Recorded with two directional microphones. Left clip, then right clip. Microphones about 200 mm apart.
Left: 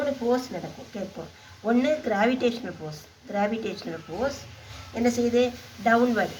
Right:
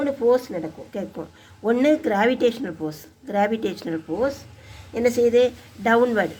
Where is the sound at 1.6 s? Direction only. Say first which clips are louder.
Right 5 dB; 35° right (ahead or behind).